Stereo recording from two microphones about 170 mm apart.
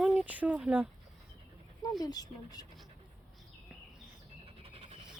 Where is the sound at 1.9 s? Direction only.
20° left (ahead or behind).